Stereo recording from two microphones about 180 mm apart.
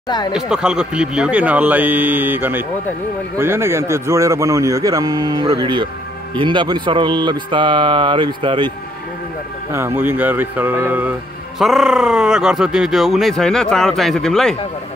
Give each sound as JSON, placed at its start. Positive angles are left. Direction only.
{"t": 0.3, "sound": "a man's voice", "side_deg": -5}
{"t": 9.7, "sound": "speech", "side_deg": -15}